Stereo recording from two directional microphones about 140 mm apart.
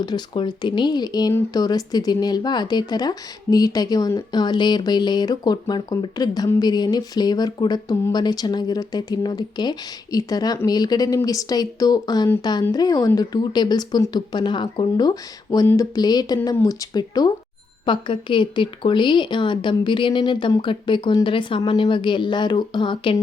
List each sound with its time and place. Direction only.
0.0 s speech: 30° left (ahead or behind)